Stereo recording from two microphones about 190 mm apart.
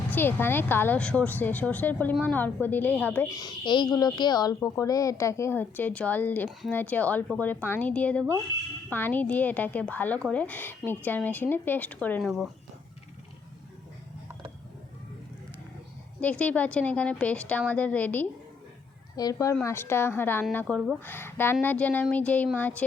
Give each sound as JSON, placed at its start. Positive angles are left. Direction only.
{"t": 0.1, "sound": "speech", "side_deg": 10}
{"t": 16.2, "sound": "speech", "side_deg": 5}